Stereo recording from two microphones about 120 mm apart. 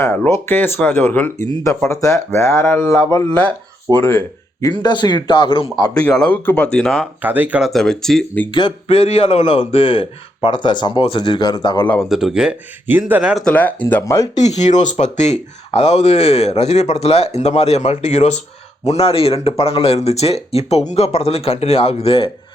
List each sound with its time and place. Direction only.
0.0 s speech: 25° left (ahead or behind)
4.6 s a man's voice: 35° left (ahead or behind)
6.0 s speech: 5° left (ahead or behind)
7.2 s speech: 15° right (ahead or behind)
7.7 s speech: 5° left (ahead or behind)
8.4 s a man's voice: 45° left (ahead or behind)
12.0 s speech: 5° right (ahead or behind)
13.5 s speech: 15° left (ahead or behind)
14.0 s speech: 25° left (ahead or behind)
14.3 s speech: 70° left (ahead or behind)
18.9 s speech: 55° left (ahead or behind)